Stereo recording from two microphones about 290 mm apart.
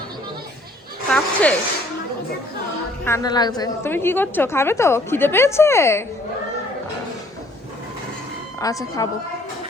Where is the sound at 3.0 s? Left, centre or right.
Centre.